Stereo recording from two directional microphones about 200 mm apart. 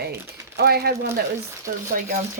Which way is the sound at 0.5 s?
50° right (ahead or behind).